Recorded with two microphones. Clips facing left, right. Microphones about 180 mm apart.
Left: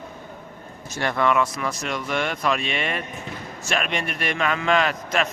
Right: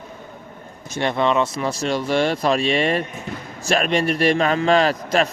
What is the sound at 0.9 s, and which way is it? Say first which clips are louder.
A man's voice: right 2 dB; 20° right (ahead or behind).